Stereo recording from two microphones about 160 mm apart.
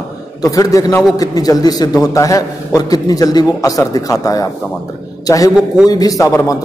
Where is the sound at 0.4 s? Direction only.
20° left (ahead or behind).